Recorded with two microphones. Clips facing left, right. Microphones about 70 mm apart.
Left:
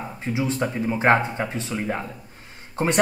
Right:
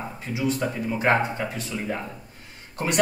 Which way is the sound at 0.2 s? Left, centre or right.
Left.